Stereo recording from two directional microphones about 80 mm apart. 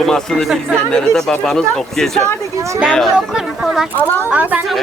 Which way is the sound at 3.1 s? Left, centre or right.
Centre.